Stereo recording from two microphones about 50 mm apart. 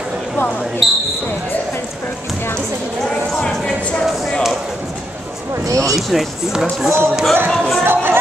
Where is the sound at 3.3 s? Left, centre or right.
Centre.